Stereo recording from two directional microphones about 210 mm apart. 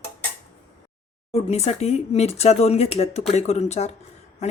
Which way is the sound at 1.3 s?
30° left (ahead or behind).